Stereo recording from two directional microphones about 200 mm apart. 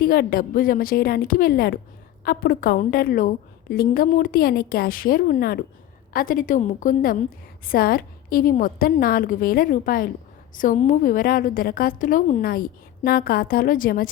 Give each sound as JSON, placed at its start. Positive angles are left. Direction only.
{"t": 0.0, "sound": "a woman's voice", "side_deg": 45}